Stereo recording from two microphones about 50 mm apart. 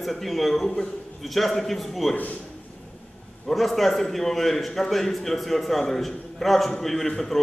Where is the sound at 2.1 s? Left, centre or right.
Left.